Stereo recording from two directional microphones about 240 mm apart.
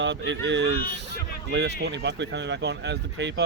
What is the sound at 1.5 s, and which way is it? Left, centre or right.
Speech, right.